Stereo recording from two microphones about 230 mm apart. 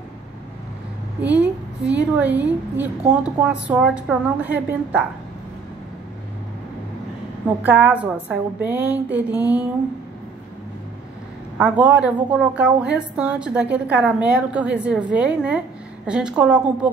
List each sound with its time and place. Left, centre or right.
1.2 s a woman's voice: centre
7.6 s a woman's voice: centre
11.5 s a woman's voice: centre